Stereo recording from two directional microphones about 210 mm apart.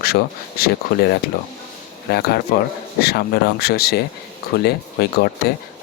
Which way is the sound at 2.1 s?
50° left (ahead or behind).